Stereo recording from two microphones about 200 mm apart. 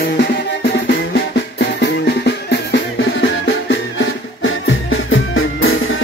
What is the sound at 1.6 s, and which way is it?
Music, 60° left (ahead or behind).